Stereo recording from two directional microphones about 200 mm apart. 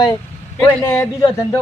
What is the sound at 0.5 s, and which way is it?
Speech, 5° left (ahead or behind).